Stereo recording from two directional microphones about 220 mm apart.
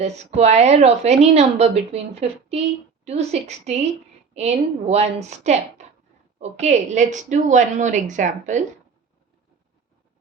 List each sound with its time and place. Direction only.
0.0 s a woman's voice: 30° right (ahead or behind)